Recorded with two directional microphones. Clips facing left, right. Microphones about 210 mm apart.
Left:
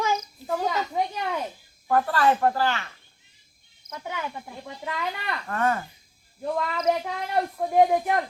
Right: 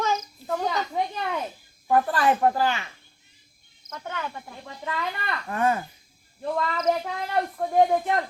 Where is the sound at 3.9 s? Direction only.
10° left (ahead or behind).